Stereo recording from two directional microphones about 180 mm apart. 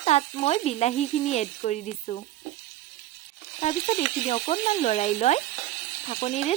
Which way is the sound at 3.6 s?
35° left (ahead or behind).